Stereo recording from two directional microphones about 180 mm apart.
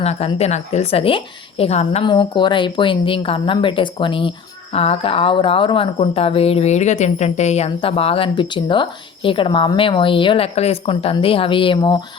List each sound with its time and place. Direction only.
0.0 s a woman's voice: 35° left (ahead or behind)